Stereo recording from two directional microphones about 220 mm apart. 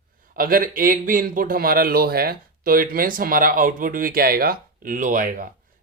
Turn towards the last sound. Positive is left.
turn(degrees=-40)  # may be behind; listen again after turning